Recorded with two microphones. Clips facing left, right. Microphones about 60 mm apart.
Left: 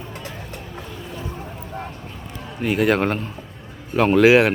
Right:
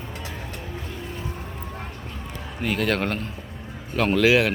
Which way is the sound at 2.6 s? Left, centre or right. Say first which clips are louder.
Left 5 dB; centre.